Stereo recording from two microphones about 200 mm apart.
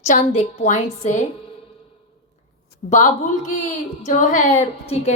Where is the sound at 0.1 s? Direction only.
40° left (ahead or behind).